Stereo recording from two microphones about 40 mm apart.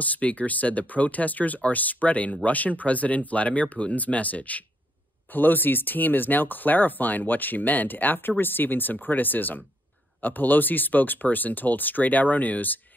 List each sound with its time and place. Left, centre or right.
0.0 s speech: left
5.3 s speech: left